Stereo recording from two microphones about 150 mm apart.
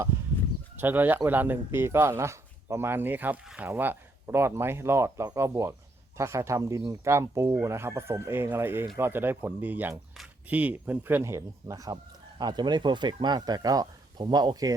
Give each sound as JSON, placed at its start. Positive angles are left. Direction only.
{"t": 0.8, "sound": "speech", "side_deg": -10}